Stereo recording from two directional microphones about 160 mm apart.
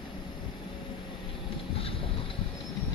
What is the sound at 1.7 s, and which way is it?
Vehicle, 35° left (ahead or behind).